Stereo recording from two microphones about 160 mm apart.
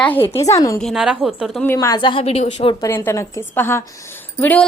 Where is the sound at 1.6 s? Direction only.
20° left (ahead or behind); by 2.7 s 35° left (ahead or behind).